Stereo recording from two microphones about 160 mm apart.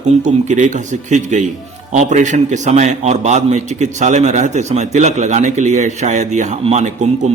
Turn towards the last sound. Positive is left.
turn(degrees=-45)  # may be behind; listen again after turning